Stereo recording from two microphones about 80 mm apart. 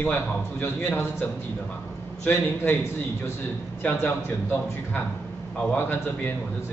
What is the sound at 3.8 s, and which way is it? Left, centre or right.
A man's voice, left.